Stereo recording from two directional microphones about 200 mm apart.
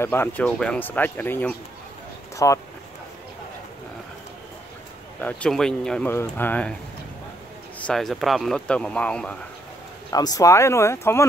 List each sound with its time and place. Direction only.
0.0 s speech: 10° left (ahead or behind)
5.2 s speech: 5° left (ahead or behind)
7.8 s speech: centre (ahead or behind)
10.1 s speech: 20° left (ahead or behind)